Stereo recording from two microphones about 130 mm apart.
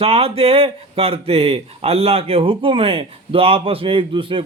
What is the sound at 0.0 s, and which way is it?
A man's voice, 50° right (ahead or behind).